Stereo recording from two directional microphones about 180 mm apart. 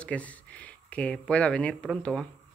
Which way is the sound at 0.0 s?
10° left (ahead or behind).